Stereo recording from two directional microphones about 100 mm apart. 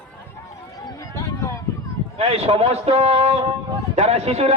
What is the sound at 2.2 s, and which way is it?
A man's voice, 85° right.